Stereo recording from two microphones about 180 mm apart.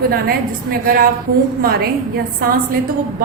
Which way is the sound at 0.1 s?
55° right (ahead or behind).